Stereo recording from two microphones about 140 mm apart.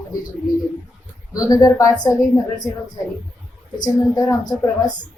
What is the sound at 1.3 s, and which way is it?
Speech, 25° left (ahead or behind).